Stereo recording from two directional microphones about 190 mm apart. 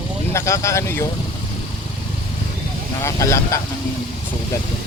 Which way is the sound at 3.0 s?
15° left (ahead or behind).